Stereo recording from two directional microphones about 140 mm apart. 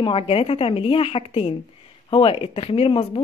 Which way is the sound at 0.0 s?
45° left (ahead or behind).